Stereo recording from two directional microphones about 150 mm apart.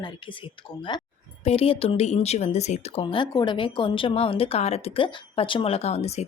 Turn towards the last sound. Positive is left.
turn(degrees=45)  # may be behind; listen again after turning